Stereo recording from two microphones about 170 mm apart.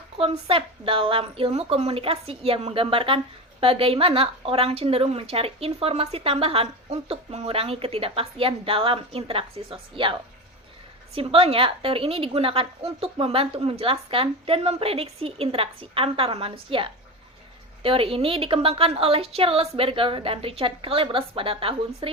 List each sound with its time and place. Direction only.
0.2 s a woman's voice: 35° right (ahead or behind)